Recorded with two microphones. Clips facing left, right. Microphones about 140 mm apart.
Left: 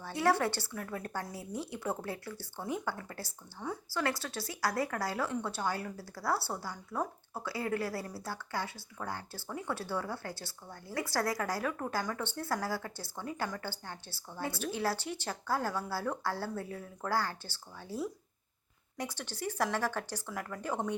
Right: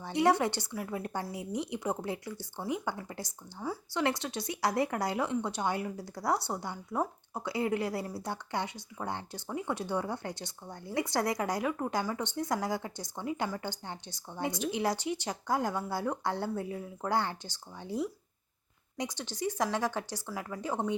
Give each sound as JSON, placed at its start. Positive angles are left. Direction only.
{"t": 0.0, "sound": "speech", "side_deg": -20}